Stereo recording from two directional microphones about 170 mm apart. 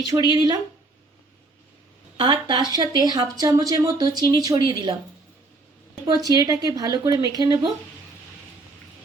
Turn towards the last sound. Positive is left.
turn(degrees=-20)  # may be behind; listen again after turning